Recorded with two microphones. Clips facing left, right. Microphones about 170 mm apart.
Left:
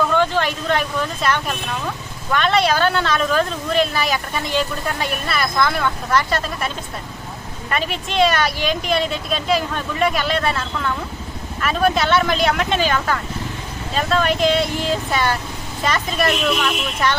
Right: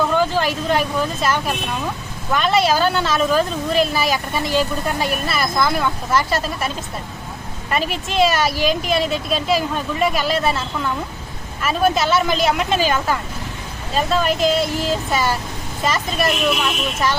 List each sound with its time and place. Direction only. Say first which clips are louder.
0.2 s speech: even; 5° right (ahead or behind)
7.7 s speech: right 2 dB; centre (ahead or behind)